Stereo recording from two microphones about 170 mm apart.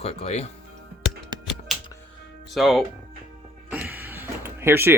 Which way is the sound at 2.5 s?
Centre (ahead or behind).